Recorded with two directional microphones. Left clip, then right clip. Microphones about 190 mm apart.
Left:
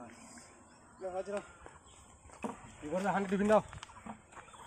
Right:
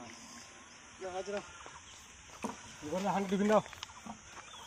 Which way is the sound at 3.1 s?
20° right (ahead or behind).